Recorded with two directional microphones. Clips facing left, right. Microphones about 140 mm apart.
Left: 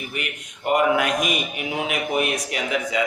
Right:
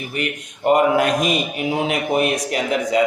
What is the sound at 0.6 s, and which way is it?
Speech, 35° right (ahead or behind).